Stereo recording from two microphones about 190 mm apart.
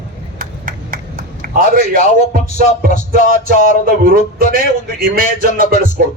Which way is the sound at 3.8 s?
50° right (ahead or behind).